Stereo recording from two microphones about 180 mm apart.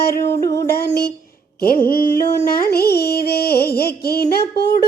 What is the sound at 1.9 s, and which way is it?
Music, 55° left (ahead or behind).